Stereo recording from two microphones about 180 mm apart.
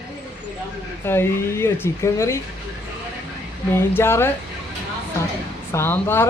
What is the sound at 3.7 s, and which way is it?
Speech, 15° left (ahead or behind).